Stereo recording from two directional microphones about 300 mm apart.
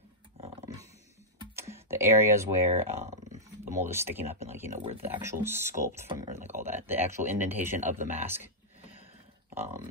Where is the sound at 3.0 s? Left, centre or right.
Right.